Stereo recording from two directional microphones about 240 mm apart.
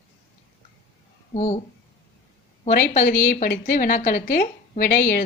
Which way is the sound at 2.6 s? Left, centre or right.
Left.